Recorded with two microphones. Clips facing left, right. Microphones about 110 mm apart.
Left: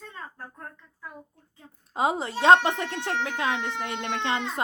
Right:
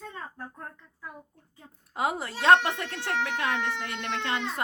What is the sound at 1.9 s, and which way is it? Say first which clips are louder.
Speech: left 4 dB; 20° left (ahead or behind).